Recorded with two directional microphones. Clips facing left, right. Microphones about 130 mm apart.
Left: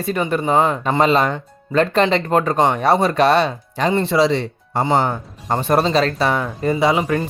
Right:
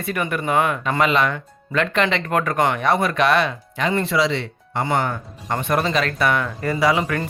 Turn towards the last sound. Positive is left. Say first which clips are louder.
# left 3 dB
turn(degrees=25)  # may be behind; listen again after turning